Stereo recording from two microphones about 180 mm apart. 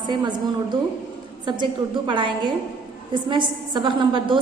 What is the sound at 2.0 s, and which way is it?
A woman's voice, 25° right (ahead or behind).